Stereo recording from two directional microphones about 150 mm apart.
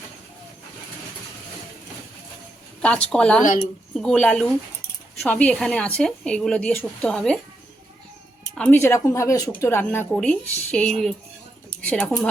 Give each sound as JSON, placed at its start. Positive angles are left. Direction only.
{"t": 2.8, "sound": "a woman's voice", "side_deg": 5}
{"t": 3.4, "sound": "speech", "side_deg": 55}
{"t": 3.9, "sound": "a woman's voice", "side_deg": 5}
{"t": 8.5, "sound": "a woman's voice", "side_deg": 10}